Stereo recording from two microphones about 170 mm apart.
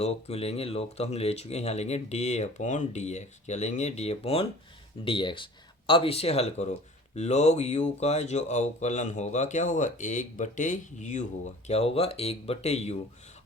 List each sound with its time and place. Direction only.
0.0 s speech: 35° left (ahead or behind)